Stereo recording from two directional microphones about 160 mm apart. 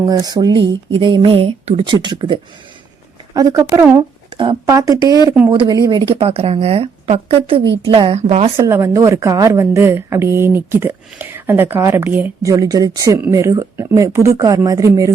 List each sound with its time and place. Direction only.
0.0 s a woman's voice: 25° right (ahead or behind); by 8.5 s 40° right (ahead or behind)
8.5 s a woman's voice: 20° right (ahead or behind)